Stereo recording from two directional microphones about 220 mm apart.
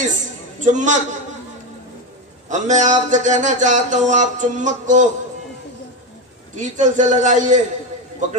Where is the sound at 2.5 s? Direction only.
35° right (ahead or behind).